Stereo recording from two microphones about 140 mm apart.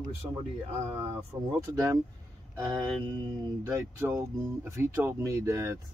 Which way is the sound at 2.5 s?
30° right (ahead or behind).